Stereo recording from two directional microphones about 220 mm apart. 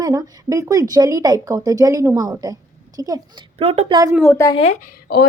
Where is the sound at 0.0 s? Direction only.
15° right (ahead or behind).